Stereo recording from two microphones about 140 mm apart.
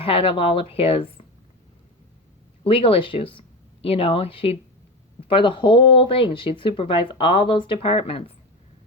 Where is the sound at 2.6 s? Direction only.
40° left (ahead or behind).